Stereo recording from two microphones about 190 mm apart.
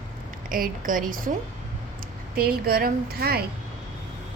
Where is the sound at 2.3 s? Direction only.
55° right (ahead or behind).